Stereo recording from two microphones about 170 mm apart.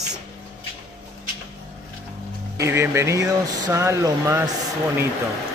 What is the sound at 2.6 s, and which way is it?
Speech, 15° right (ahead or behind).